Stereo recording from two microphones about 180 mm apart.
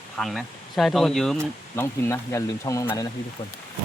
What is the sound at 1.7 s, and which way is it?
Speech, 15° left (ahead or behind).